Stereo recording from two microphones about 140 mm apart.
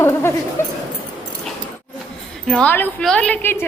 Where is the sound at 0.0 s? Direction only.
15° left (ahead or behind).